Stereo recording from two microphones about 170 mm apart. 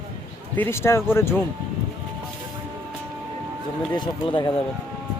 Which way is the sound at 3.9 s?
25° left (ahead or behind).